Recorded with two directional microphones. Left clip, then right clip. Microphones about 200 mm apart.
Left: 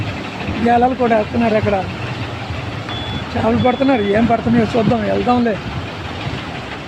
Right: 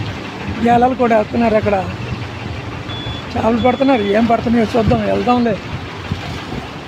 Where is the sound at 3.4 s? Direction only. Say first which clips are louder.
Right 1 dB; 15° right (ahead or behind).